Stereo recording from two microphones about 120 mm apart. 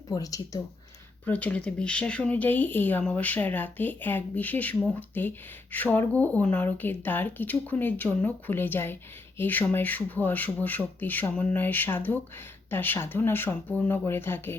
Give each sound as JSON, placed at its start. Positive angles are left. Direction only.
{"t": 0.1, "sound": "speech", "side_deg": 30}
{"t": 1.2, "sound": "speech", "side_deg": 10}